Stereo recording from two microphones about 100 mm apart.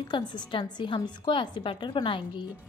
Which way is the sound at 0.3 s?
50° left (ahead or behind).